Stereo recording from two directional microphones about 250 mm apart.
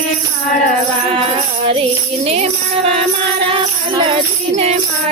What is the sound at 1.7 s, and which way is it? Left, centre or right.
Tambourine, right.